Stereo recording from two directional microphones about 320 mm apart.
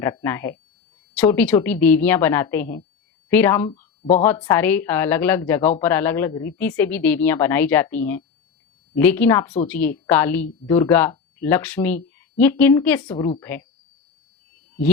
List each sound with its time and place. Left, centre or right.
0.0 s a woman's voice: centre